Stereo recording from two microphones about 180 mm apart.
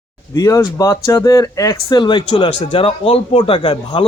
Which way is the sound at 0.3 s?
20° left (ahead or behind).